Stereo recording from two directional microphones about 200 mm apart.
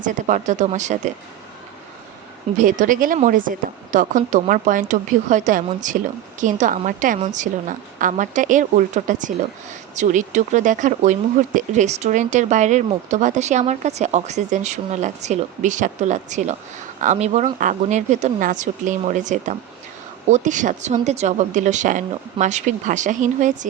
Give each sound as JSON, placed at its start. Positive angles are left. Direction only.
{"t": 0.0, "sound": "speech", "side_deg": -40}
{"t": 2.6, "sound": "speech", "side_deg": -40}